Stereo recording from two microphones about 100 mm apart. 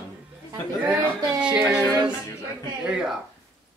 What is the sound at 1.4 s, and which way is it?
Speech, 10° right (ahead or behind).